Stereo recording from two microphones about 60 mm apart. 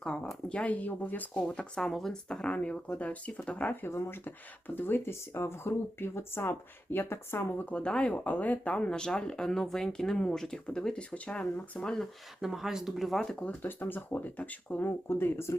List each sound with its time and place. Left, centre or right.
0.4 s speech: left
1.8 s speech: centre
2.5 s speech: left
3.8 s speech: left
4.7 s speech: left
7.6 s speech: centre
8.1 s speech: left
12.4 s speech: centre
13.6 s speech: left
14.8 s speech: left